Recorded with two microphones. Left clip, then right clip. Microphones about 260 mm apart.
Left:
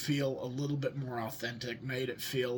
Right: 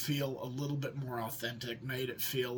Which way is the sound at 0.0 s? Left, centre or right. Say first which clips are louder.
Left 3 dB; centre.